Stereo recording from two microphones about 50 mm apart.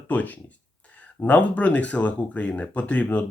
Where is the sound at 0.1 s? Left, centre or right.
Left.